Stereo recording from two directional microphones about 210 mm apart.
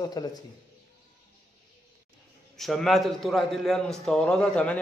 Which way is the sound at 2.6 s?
Centre (ahead or behind).